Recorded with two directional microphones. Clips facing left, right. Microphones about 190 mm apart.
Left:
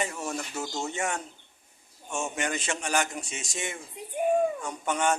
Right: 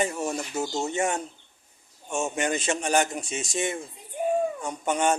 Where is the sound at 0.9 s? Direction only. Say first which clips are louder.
Right 5 dB; 25° right (ahead or behind).